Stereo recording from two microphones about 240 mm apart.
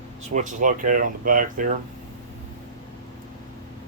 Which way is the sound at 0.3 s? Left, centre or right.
Right.